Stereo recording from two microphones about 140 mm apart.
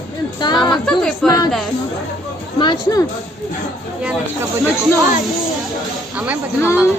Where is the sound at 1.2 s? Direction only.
25° left (ahead or behind).